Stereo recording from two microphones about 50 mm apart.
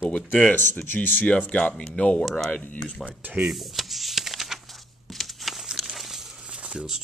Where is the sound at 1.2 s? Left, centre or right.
Left.